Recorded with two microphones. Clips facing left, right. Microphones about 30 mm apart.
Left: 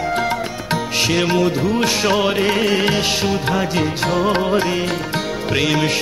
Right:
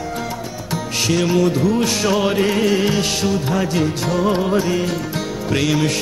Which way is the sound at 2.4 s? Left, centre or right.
Left.